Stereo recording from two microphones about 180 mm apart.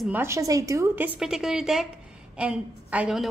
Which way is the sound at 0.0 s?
10° right (ahead or behind).